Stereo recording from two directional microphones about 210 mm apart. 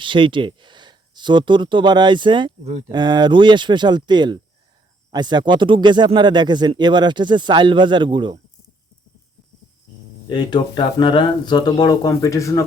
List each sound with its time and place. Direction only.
0.0 s speech: 25° right (ahead or behind)
10.2 s speech: 20° left (ahead or behind)